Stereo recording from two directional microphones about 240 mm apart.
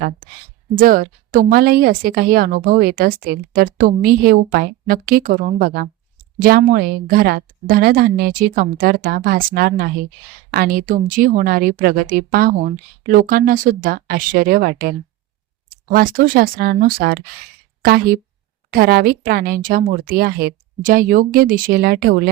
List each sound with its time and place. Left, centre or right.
0.8 s a woman's voice: right